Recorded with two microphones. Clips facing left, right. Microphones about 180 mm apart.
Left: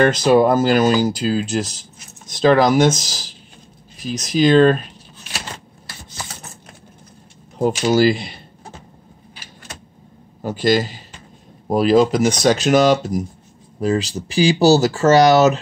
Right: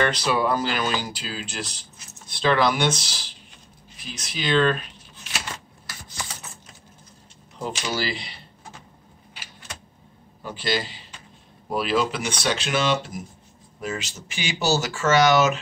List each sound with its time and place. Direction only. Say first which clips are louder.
0.0 s speech: left 9 dB; 45° left (ahead or behind)
7.5 s speech: left 13 dB; 45° left (ahead or behind)
10.4 s a man's voice: left 10 dB; 45° left (ahead or behind)